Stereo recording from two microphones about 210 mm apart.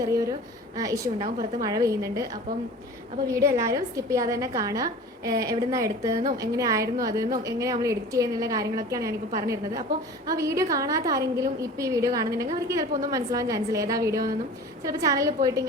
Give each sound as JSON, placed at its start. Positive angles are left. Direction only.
{"t": 0.8, "sound": "a woman's voice", "side_deg": -15}
{"t": 1.2, "sound": "a woman's voice", "side_deg": -40}
{"t": 1.6, "sound": "a woman's voice", "side_deg": -15}
{"t": 3.2, "sound": "a woman's voice", "side_deg": -15}